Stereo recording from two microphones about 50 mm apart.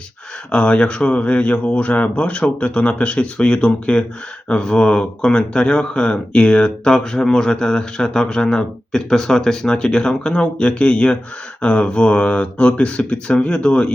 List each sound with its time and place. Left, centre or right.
0.5 s speech: left